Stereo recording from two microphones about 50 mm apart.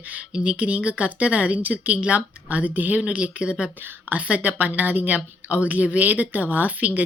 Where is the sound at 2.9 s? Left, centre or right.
Right.